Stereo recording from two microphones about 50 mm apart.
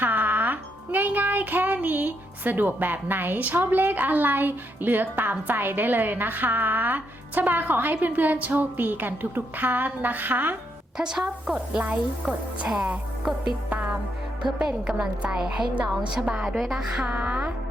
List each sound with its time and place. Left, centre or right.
0.0 s speech: right
10.9 s a woman's voice: centre
11.5 s music: right
13.3 s a woman's voice: centre
14.4 s a woman's voice: centre
16.6 s music: centre
17.0 s music: right